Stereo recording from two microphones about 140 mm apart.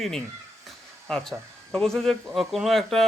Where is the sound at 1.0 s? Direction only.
5° left (ahead or behind).